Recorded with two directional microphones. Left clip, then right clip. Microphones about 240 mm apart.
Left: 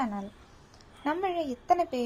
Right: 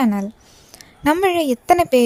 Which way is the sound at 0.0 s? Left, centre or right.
Right.